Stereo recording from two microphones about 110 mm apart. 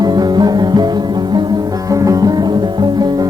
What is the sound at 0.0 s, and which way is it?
Music, 40° right (ahead or behind).